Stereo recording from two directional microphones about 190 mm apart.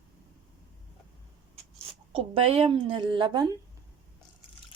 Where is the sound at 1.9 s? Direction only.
30° right (ahead or behind).